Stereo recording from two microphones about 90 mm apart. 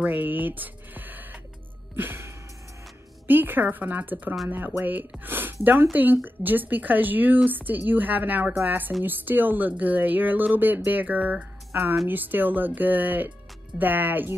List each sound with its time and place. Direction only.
0.0 s speech: 20° right (ahead or behind)
2.0 s music: 25° right (ahead or behind)
3.3 s speech: 20° right (ahead or behind)